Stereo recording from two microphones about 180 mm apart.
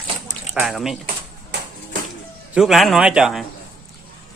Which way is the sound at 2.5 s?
Centre (ahead or behind).